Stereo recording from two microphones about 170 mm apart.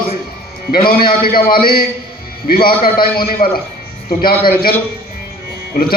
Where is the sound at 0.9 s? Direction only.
60° left (ahead or behind).